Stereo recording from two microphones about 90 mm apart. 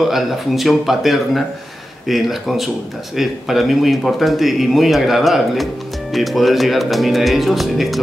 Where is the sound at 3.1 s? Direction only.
Centre (ahead or behind).